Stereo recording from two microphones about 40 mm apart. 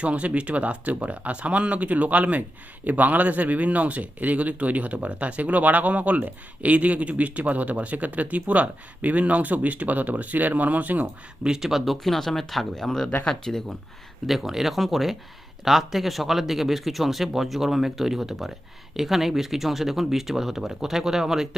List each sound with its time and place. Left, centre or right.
0.0 s speech: right
11.4 s speech: centre
12.0 s speech: centre
14.3 s speech: centre